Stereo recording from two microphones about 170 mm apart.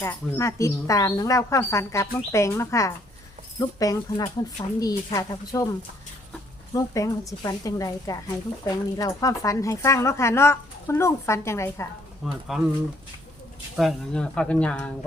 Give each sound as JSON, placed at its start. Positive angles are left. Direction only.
{"t": 0.0, "sound": "a woman's voice", "side_deg": 15}
{"t": 6.7, "sound": "a woman's voice", "side_deg": 20}
{"t": 12.2, "sound": "speech", "side_deg": 0}
{"t": 13.7, "sound": "speech", "side_deg": 5}